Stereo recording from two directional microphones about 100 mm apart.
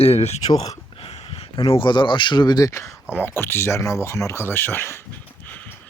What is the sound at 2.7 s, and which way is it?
Speech, 30° left (ahead or behind).